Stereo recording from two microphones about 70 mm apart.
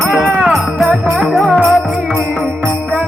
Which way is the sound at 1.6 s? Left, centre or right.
Centre.